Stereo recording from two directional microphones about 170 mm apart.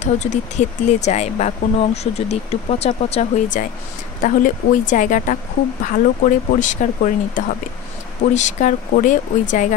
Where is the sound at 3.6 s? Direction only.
50° left (ahead or behind).